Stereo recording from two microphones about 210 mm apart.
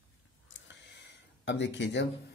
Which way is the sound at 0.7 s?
55° left (ahead or behind).